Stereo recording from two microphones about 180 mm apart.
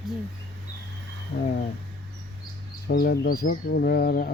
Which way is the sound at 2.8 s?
60° left (ahead or behind).